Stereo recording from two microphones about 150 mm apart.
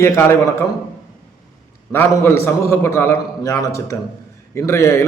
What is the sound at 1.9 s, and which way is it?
A man's voice, 15° left (ahead or behind).